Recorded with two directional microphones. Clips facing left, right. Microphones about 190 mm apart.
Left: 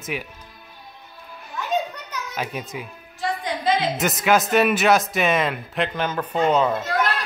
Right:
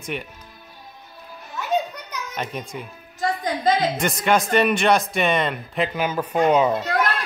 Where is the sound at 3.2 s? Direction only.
40° right (ahead or behind).